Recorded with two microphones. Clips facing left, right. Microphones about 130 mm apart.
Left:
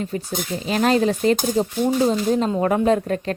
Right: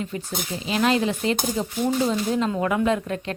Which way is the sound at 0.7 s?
45° left (ahead or behind).